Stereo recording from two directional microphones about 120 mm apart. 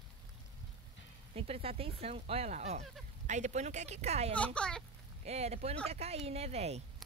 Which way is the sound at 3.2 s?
80° right.